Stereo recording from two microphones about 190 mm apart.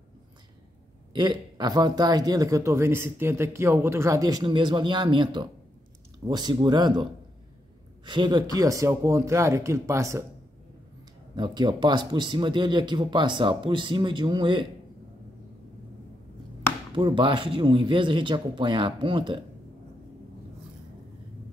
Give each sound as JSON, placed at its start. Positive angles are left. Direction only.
{"t": 1.1, "sound": "speech", "side_deg": -25}
{"t": 11.3, "sound": "speech", "side_deg": -25}
{"t": 16.9, "sound": "speech", "side_deg": -25}